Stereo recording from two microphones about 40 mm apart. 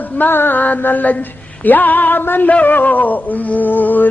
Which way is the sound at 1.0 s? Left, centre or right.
Left.